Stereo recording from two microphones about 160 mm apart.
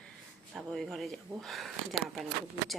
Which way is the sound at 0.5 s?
Centre (ahead or behind).